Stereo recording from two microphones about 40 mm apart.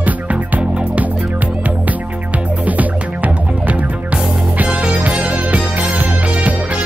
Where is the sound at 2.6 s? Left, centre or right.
Right.